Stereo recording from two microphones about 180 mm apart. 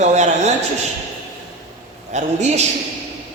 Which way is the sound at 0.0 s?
40° right (ahead or behind).